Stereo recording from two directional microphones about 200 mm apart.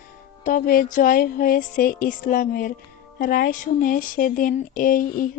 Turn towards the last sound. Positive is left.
turn(degrees=45)  # may be behind; listen again after turning